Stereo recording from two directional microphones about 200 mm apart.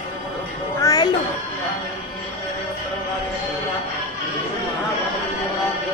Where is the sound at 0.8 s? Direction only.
20° left (ahead or behind).